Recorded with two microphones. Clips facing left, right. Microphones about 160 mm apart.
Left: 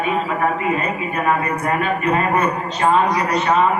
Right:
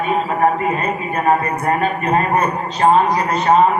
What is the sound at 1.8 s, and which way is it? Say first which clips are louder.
A man's voice: right 1 dB; 40° right (ahead or behind).